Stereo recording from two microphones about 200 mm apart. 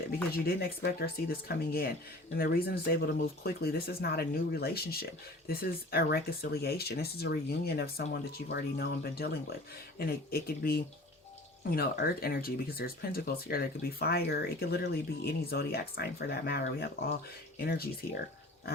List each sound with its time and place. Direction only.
0.4 s speech: 50° left (ahead or behind)